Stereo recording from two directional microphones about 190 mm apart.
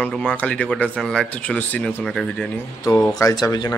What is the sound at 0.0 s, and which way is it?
Speech, 5° left (ahead or behind).